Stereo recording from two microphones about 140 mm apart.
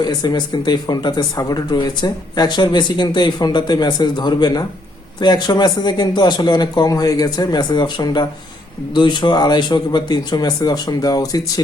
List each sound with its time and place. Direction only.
0.0 s speech: 30° left (ahead or behind)